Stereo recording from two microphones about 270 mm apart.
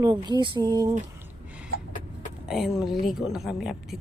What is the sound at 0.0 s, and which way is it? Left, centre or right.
Speech, centre.